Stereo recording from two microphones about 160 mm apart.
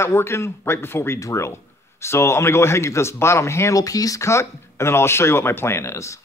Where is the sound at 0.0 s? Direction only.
15° left (ahead or behind).